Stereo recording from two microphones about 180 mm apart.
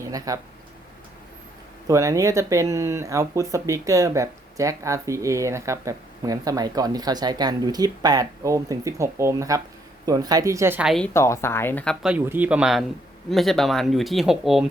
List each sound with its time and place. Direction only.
0.0 s speech: 20° right (ahead or behind)
1.9 s speech: 15° right (ahead or behind); by 11.1 s centre (ahead or behind)
11.1 s speech: 15° left (ahead or behind)
12.0 s speech: 10° right (ahead or behind)